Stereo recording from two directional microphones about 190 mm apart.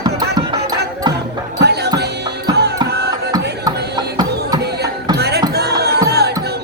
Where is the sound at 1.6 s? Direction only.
60° right (ahead or behind).